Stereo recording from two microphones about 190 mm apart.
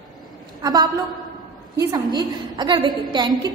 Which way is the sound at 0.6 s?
20° right (ahead or behind).